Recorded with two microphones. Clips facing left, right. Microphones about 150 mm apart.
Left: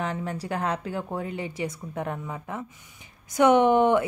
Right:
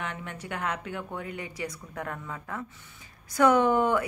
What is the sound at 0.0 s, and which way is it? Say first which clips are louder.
A woman's voice: left 7 dB; 35° left (ahead or behind).